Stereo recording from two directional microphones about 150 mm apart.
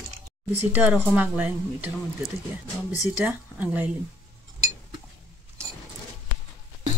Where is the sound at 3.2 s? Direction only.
10° right (ahead or behind).